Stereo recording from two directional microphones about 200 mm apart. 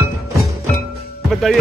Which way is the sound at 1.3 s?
Centre (ahead or behind).